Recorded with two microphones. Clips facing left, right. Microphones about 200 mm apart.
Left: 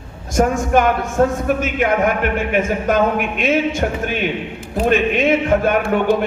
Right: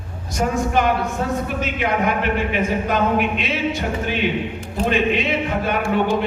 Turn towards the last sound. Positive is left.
turn(degrees=55)  # may be behind; listen again after turning